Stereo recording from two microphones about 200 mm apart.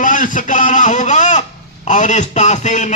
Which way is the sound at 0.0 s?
40° left (ahead or behind).